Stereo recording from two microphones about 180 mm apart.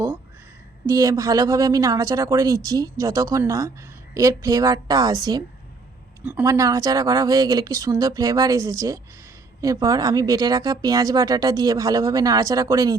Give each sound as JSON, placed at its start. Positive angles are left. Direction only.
{"t": 0.9, "sound": "a woman's voice", "side_deg": -15}